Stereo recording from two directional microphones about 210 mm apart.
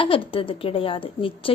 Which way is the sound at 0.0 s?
25° left (ahead or behind).